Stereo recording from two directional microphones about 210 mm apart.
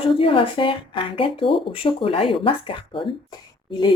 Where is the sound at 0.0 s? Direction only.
25° left (ahead or behind).